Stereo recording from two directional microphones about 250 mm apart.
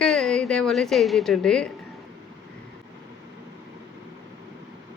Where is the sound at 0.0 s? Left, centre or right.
Centre.